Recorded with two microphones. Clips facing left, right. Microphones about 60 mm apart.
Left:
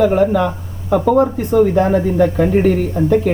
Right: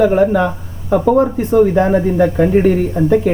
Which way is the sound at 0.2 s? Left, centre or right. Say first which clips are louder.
Right 1 dB; centre.